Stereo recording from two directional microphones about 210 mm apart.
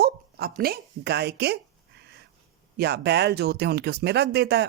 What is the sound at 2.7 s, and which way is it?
Speech, 50° right (ahead or behind).